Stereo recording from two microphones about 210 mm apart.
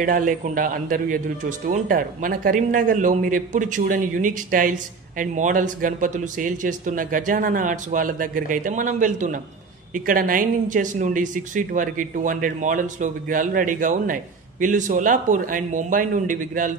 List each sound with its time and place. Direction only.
0.0 s speech: 40° right (ahead or behind)